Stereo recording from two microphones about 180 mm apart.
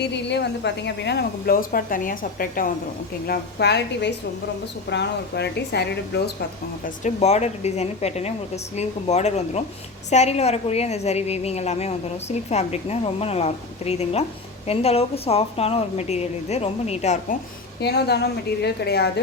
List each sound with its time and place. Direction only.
0.0 s speech: 70° left (ahead or behind); by 2.7 s 50° left (ahead or behind)
3.2 s speech: 65° left (ahead or behind)
6.8 s a woman's voice: 40° left (ahead or behind)
17.7 s speech: 65° left (ahead or behind)